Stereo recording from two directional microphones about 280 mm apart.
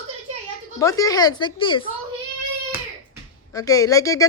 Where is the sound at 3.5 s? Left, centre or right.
Centre.